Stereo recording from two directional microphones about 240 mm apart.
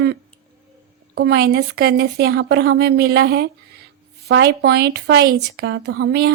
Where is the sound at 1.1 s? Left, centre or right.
Right.